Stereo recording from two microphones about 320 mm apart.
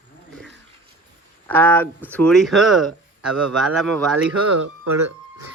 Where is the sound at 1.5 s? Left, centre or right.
Centre.